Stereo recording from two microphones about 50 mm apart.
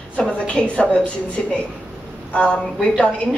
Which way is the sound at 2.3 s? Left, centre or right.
Left.